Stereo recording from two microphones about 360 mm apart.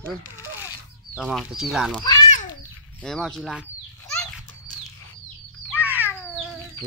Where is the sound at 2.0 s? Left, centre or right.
Centre.